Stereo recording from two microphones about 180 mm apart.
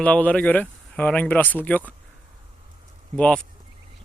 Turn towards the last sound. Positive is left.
turn(degrees=5)  # may be behind; listen again after turning